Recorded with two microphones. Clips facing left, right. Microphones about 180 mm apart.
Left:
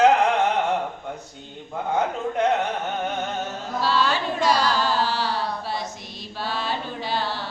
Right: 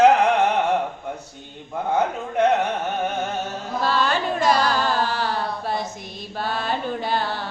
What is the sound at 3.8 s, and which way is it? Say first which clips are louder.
Carnatic music: right 1 dB; 50° right (ahead or behind).